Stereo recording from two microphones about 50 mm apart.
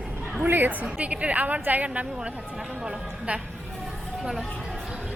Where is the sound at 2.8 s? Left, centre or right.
Right.